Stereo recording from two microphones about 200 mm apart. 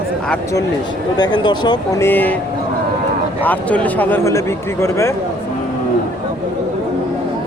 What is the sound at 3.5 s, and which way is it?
Speech, 5° left (ahead or behind).